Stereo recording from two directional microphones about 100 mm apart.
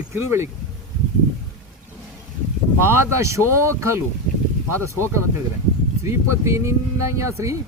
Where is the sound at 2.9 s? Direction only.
30° right (ahead or behind).